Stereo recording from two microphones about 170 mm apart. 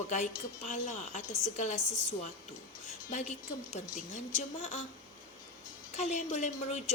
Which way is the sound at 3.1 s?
45° left (ahead or behind).